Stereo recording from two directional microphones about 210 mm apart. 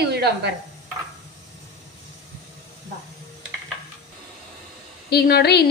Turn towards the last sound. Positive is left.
turn(degrees=50)  # may be behind; listen again after turning